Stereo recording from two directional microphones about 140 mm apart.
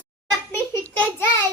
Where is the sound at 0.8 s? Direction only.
10° left (ahead or behind).